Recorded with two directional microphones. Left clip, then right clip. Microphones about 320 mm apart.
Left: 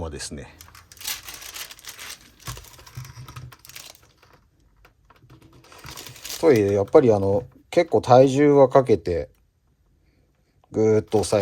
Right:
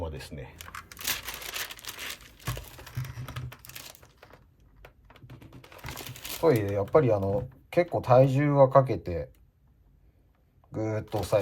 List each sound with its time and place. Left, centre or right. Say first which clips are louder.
0.0 s speech: left 5 dB; centre
1.5 s a sound: right 1 dB; centre
3.0 s typing: right 2 dB; centre
5.8 s crumpling: left 2 dB; centre
6.4 s speech: left 7 dB; left
10.7 s speech: left 13 dB; left